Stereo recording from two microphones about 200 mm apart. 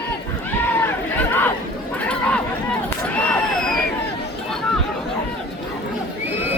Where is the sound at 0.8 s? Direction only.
10° left (ahead or behind).